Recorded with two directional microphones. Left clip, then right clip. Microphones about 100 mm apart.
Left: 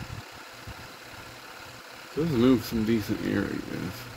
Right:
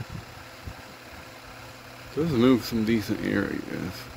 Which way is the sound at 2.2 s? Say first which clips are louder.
Right 2 dB; 10° left (ahead or behind).